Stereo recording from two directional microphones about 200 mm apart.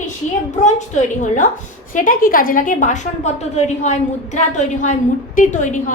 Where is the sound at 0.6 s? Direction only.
35° left (ahead or behind).